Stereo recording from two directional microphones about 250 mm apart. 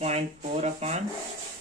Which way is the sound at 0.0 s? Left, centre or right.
Right.